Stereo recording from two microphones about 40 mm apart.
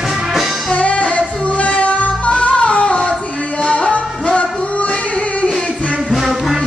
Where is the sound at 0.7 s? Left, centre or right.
Left.